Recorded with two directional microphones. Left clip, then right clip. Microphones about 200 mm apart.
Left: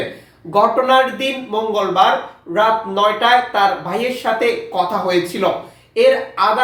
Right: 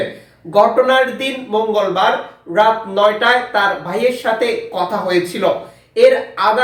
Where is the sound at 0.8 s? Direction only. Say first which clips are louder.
Even; 10° right (ahead or behind).